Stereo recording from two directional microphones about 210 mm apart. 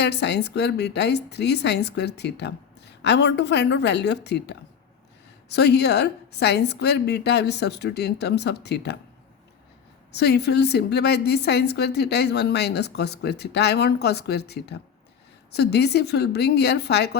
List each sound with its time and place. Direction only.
0.0 s a woman's voice: 55° left (ahead or behind)
10.1 s a woman's voice: 50° left (ahead or behind)